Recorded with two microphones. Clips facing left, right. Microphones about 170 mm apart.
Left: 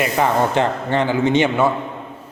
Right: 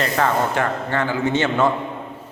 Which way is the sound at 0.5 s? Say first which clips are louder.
Left 4 dB; 20° left (ahead or behind).